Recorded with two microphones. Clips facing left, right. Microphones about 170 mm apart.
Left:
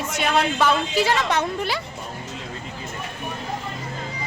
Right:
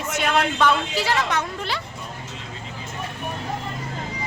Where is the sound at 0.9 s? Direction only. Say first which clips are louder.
Left 2 dB; 25° left (ahead or behind).